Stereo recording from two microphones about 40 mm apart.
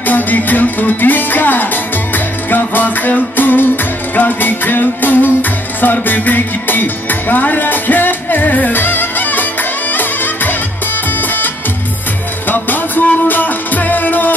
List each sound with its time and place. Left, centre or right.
0.0 s music: left
12.4 s music: left